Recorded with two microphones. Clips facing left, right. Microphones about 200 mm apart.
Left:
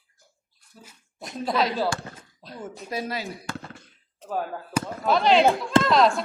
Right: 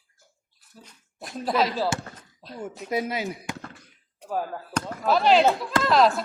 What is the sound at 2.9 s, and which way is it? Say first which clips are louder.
Speech: right 3 dB; 20° right (ahead or behind).